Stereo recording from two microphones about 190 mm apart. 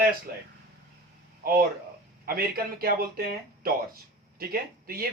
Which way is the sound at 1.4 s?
50° right (ahead or behind).